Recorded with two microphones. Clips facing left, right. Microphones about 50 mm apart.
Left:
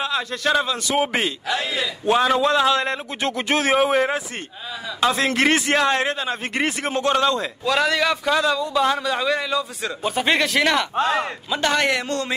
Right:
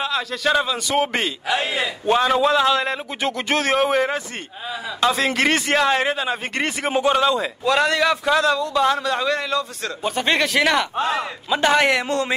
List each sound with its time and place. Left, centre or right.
0.0 s a man's voice: centre
1.6 s a man's voice: right
2.0 s a man's voice: centre
6.5 s a man's voice: centre
6.9 s a man's voice: centre